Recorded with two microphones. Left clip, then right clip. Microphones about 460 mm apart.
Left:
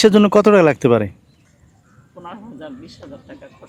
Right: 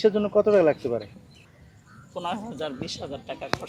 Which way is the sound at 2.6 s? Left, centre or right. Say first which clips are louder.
Right 4 dB; right.